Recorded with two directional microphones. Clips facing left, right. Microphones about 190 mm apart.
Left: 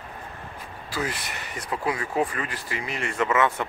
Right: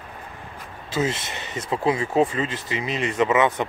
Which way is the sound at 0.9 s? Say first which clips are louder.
Right 6 dB; 25° right (ahead or behind).